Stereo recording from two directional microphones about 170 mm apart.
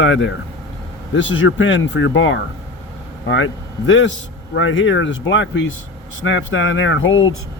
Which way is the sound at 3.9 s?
90° left.